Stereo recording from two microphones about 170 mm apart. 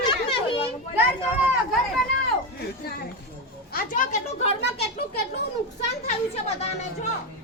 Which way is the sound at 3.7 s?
50° left (ahead or behind).